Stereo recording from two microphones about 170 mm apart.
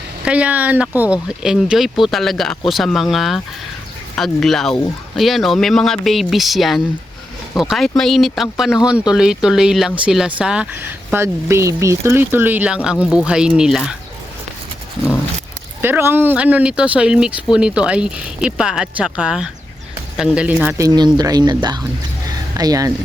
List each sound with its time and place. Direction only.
0.3 s speech: 10° right (ahead or behind)
15.8 s speech: 15° right (ahead or behind)
20.7 s speech: 20° right (ahead or behind)
22.3 s a sound: 20° right (ahead or behind)